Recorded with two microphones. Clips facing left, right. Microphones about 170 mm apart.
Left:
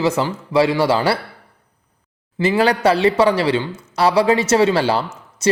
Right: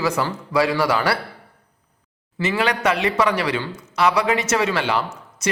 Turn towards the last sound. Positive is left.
turn(degrees=30)  # may be behind; listen again after turning